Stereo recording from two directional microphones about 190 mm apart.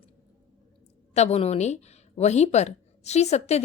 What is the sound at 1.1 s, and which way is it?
A woman's voice, 35° left (ahead or behind).